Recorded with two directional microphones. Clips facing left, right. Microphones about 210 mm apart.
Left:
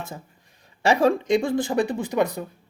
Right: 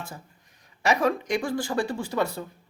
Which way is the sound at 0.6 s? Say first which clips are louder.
Left 4 dB; 30° left (ahead or behind).